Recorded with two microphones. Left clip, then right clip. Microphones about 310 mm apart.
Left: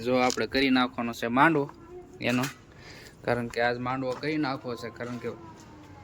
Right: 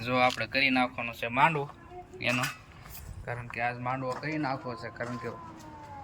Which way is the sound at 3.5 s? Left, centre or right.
Centre.